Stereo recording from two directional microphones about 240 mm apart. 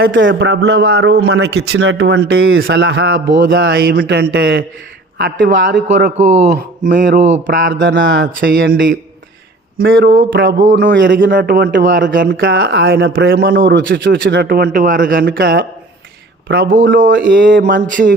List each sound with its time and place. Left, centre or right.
0.0 s a man's voice: right
6.1 s a man's voice: right
7.7 s a man's voice: right
10.6 s a man's voice: right
10.8 s a man's voice: right
11.3 s a man's voice: right